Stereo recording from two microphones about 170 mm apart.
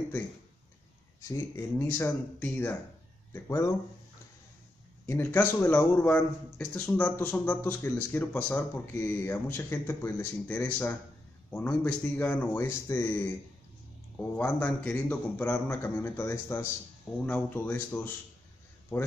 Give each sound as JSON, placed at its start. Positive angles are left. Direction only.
{"t": 1.2, "sound": "a man's voice", "side_deg": 15}
{"t": 5.0, "sound": "a man's voice", "side_deg": 15}